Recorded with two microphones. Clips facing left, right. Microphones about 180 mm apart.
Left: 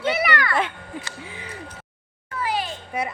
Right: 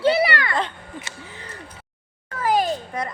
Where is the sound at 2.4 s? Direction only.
45° right (ahead or behind).